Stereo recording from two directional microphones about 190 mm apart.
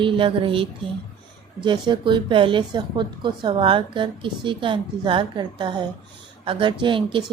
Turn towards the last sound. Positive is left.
turn(degrees=-25)  # may be behind; listen again after turning